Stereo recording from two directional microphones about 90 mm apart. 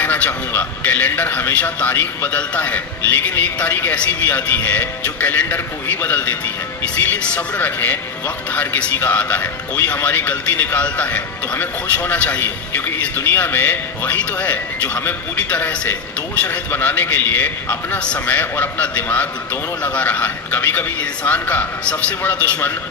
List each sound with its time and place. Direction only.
0.0 s a man's voice: 20° left (ahead or behind)